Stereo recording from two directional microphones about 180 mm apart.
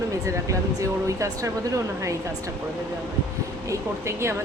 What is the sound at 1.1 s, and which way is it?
Speech, 15° right (ahead or behind).